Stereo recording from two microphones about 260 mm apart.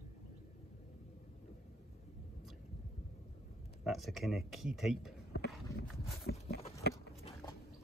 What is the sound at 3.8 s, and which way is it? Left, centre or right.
Speech, centre.